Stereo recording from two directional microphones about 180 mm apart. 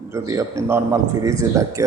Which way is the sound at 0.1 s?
15° right (ahead or behind).